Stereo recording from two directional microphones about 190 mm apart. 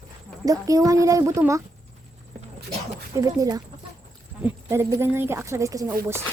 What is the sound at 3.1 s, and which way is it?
Speech, 15° right (ahead or behind).